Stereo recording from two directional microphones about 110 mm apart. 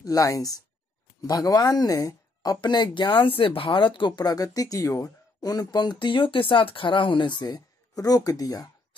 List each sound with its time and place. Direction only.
0.0 s speech: 30° left (ahead or behind)